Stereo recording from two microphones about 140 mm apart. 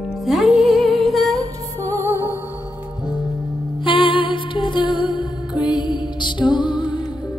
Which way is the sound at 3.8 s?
35° left (ahead or behind).